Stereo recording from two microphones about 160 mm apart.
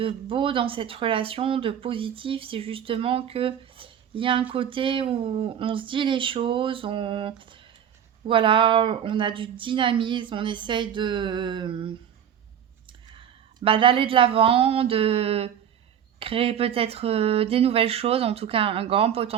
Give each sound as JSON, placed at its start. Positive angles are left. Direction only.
{"t": 0.0, "sound": "speech", "side_deg": -30}
{"t": 13.1, "sound": "speech", "side_deg": -35}